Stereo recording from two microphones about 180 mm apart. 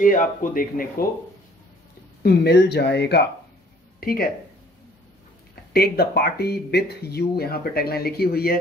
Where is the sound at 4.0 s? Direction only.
55° left (ahead or behind).